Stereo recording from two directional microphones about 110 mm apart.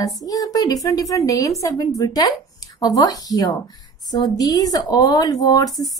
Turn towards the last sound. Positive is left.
turn(degrees=35)  # may be behind; listen again after turning